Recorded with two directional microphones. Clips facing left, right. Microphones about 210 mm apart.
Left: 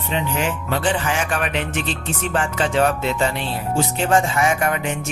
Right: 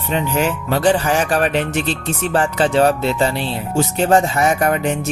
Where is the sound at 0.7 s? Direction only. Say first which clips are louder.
Right 7 dB; 40° right (ahead or behind).